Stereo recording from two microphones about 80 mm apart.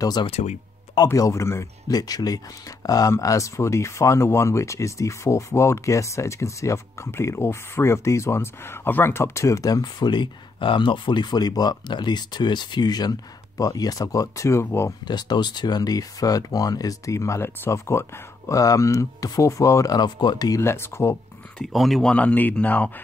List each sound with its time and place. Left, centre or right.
1.0 s speech: left
1.9 s speech: left
15.0 s speech: left
20.0 s speech: left
20.6 s speech: left
21.7 s speech: centre
22.1 s speech: centre